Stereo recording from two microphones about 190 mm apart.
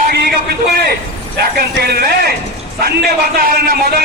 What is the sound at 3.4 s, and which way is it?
Speech, 50° right (ahead or behind).